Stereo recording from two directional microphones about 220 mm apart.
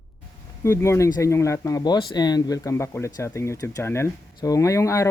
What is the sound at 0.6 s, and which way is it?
Speech, 10° left (ahead or behind).